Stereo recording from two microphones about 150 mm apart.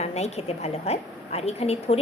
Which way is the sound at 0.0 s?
45° left (ahead or behind).